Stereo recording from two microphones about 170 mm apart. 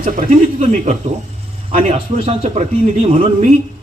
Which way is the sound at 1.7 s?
40° right (ahead or behind).